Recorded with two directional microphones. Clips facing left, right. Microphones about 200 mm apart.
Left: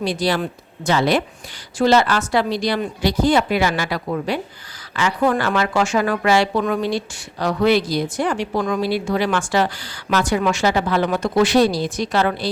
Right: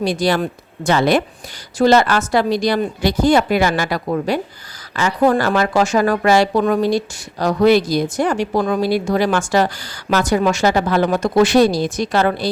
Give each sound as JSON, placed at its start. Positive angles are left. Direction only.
{"t": 0.0, "sound": "a woman's voice", "side_deg": -45}